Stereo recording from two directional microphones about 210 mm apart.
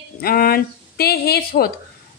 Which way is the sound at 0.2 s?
45° left (ahead or behind).